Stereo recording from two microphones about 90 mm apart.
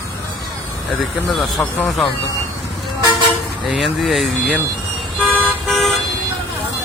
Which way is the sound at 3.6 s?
Centre (ahead or behind).